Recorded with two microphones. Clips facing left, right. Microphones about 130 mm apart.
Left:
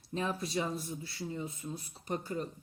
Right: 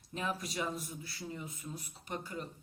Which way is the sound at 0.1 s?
30° left (ahead or behind).